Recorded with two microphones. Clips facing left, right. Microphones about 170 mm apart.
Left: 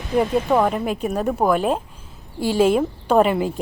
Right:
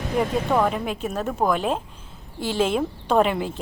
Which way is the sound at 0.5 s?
5° left (ahead or behind).